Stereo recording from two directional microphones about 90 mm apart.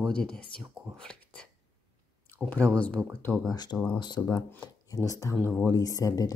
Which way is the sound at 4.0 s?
50° left (ahead or behind).